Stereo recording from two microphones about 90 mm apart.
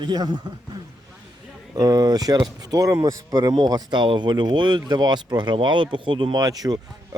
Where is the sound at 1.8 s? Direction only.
45° right (ahead or behind).